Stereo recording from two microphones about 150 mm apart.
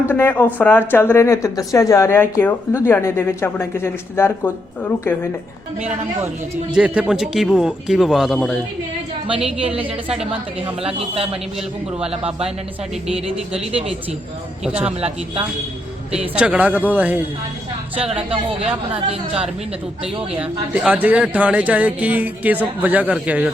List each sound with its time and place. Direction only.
0.1 s speech: 10° left (ahead or behind)
6.7 s speech: 5° right (ahead or behind)
9.7 s speech: 5° right (ahead or behind)
10.8 s a man's voice: 40° right (ahead or behind)
14.6 s speech: 5° right (ahead or behind)
16.3 s speech: 10° right (ahead or behind)
18.1 s speech: 40° right (ahead or behind)
20.4 s speech: 10° right (ahead or behind)